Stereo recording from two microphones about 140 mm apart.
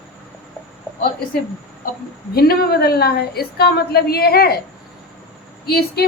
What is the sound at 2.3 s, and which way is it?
A woman's voice, 90° left.